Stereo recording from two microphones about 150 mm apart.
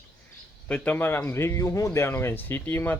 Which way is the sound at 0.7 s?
10° left (ahead or behind).